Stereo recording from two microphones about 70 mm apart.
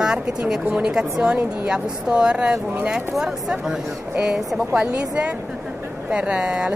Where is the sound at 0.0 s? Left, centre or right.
Centre.